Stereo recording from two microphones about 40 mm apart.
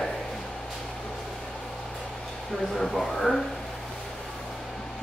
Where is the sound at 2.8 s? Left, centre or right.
Centre.